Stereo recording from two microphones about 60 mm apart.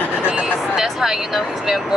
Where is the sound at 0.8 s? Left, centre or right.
Centre.